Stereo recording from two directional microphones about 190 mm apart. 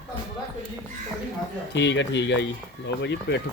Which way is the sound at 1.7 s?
70° left (ahead or behind).